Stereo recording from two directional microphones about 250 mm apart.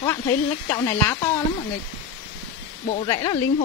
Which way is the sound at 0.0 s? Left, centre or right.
Centre.